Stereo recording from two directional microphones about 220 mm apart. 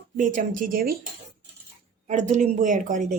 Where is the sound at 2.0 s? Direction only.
35° right (ahead or behind).